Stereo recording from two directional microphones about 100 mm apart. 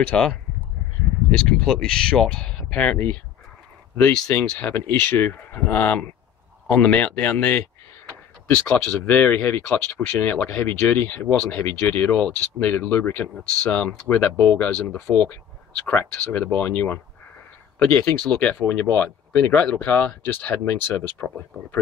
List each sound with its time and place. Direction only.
0.0 s speech: 10° left (ahead or behind)